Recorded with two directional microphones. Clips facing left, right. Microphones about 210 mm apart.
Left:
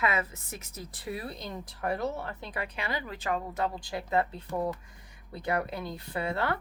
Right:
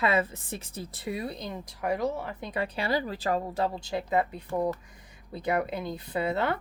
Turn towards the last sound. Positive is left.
turn(degrees=-20)  # may be behind; listen again after turning